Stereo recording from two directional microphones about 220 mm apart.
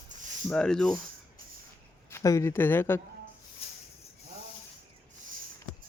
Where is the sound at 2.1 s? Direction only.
15° left (ahead or behind).